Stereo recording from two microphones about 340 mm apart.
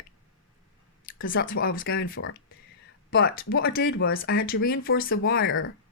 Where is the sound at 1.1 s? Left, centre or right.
Left.